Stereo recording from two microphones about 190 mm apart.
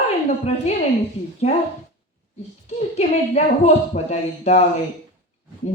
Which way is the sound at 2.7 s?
35° left (ahead or behind).